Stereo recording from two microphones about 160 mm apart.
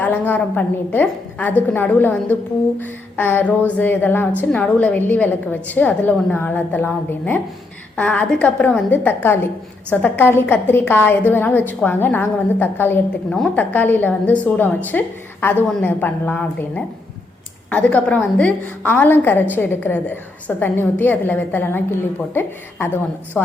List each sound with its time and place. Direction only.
0.0 s a woman's voice: 10° left (ahead or behind)